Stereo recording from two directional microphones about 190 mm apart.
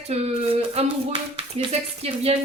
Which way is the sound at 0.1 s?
35° right (ahead or behind).